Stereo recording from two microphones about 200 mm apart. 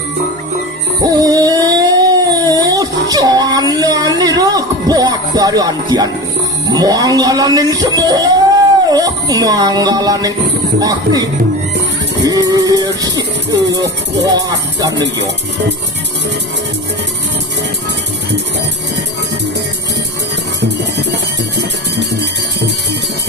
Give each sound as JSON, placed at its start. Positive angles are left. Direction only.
{"t": 1.0, "sound": "a sound", "side_deg": -20}
{"t": 6.7, "sound": "speech", "side_deg": -20}
{"t": 12.2, "sound": "music", "side_deg": -20}
{"t": 13.1, "sound": "speech", "side_deg": -20}
{"t": 21.6, "sound": "music", "side_deg": -60}